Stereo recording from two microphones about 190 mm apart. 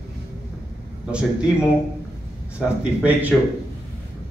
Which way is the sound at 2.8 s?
5° right (ahead or behind).